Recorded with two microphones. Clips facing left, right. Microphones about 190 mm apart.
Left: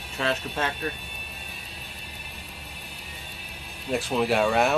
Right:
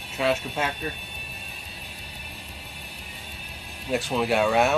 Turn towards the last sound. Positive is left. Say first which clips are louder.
# right 1 dB
turn(degrees=0)  # may be behind; listen again after turning